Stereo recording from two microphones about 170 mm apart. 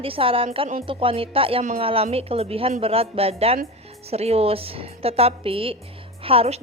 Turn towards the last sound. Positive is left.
turn(degrees=-35)  # may be behind; listen again after turning